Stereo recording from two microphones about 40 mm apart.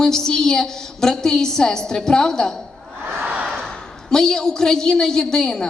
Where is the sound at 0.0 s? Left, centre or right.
Centre.